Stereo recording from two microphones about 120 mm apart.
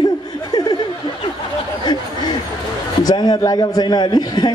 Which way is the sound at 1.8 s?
35° left (ahead or behind).